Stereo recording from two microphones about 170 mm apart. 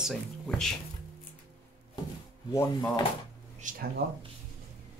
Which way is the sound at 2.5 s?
20° left (ahead or behind).